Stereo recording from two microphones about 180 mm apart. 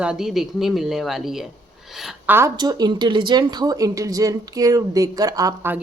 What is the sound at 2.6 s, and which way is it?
Speech, 25° right (ahead or behind).